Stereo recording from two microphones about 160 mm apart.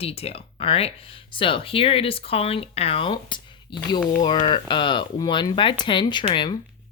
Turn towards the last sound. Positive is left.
turn(degrees=30)  # may be behind; listen again after turning